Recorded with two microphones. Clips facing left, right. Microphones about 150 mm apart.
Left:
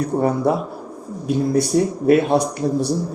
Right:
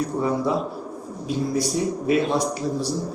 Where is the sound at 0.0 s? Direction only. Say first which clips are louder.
Left 5 dB; 60° left (ahead or behind).